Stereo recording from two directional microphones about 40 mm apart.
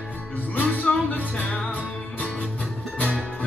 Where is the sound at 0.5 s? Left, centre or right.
Left.